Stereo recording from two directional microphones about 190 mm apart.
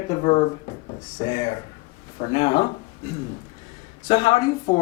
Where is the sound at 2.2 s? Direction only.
40° left (ahead or behind).